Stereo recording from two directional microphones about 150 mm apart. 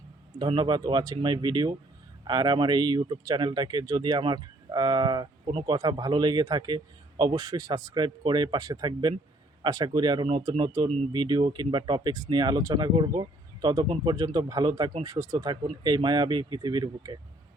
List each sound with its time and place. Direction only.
0.3 s speech: 30° right (ahead or behind)